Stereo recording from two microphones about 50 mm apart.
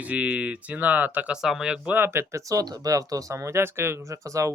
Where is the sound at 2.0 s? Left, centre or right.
Right.